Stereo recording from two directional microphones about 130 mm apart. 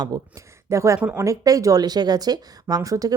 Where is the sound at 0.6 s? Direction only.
20° right (ahead or behind).